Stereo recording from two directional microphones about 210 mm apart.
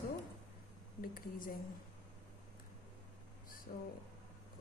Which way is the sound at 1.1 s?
40° left (ahead or behind).